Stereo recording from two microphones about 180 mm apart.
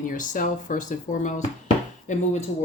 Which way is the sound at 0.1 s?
50° left (ahead or behind).